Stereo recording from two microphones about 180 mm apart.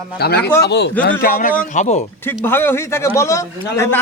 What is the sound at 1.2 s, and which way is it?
Speech, 50° left (ahead or behind).